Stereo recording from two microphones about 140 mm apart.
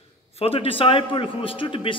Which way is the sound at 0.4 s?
40° left (ahead or behind).